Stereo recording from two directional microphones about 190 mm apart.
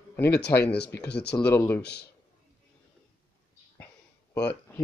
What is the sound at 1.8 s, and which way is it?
Speech, 60° left (ahead or behind).